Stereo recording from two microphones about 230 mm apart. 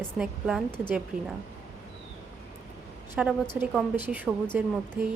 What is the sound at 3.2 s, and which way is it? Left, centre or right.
A woman's voice, centre.